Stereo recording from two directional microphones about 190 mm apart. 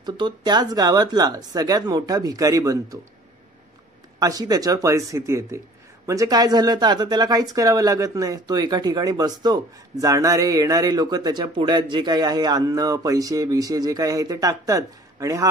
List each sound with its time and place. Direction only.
0.0 s speech: 25° right (ahead or behind)
4.2 s speech: 20° right (ahead or behind)